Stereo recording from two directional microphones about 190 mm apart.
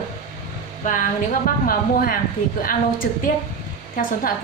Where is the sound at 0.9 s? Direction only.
45° left (ahead or behind).